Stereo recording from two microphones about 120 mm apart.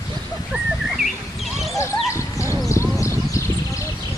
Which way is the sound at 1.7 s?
25° left (ahead or behind).